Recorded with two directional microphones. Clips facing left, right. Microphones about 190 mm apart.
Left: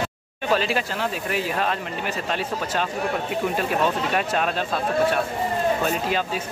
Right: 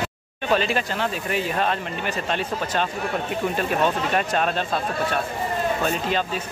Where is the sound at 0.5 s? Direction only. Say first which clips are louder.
Right 1 dB; 5° left (ahead or behind).